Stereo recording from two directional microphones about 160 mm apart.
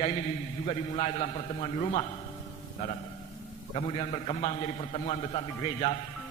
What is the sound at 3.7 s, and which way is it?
A man's voice, 40° left (ahead or behind).